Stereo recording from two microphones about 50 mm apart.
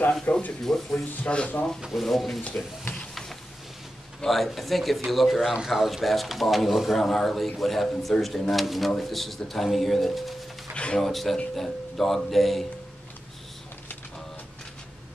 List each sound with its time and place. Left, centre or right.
0.2 s speech: left
0.7 s speech: centre
1.2 s speech: left
1.9 s speech: centre
4.2 s speech: centre
10.7 s a sound: left
11.0 s speech: centre